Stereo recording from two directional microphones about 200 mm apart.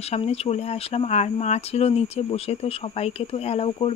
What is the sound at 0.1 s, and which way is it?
Speech, 30° left (ahead or behind).